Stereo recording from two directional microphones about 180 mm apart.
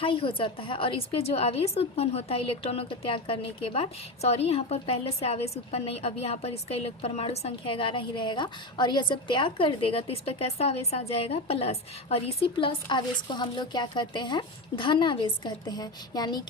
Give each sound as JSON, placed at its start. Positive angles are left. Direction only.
{"t": 0.0, "sound": "a woman's voice", "side_deg": 30}